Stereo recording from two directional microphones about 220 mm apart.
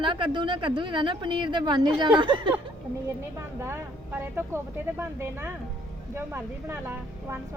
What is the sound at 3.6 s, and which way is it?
Speech, 10° right (ahead or behind).